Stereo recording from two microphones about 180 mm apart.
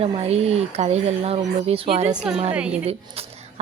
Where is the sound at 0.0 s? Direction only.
35° right (ahead or behind).